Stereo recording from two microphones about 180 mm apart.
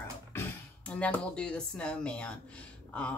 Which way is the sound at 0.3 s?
10° left (ahead or behind).